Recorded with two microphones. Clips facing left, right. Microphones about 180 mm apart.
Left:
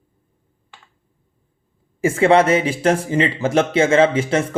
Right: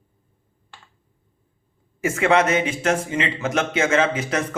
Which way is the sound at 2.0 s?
30° left (ahead or behind).